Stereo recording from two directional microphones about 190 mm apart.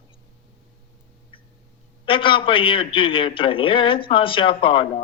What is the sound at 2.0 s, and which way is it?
A man's voice, 25° left (ahead or behind).